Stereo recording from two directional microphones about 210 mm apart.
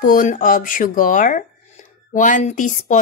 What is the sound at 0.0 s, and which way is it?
A woman's voice, 40° left (ahead or behind).